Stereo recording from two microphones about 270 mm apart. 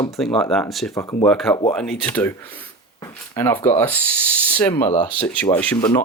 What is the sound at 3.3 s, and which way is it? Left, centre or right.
Speech, centre.